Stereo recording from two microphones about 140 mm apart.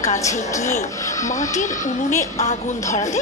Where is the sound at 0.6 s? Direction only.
60° left (ahead or behind).